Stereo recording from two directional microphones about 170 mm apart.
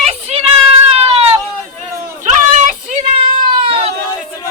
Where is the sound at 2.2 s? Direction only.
45° right (ahead or behind).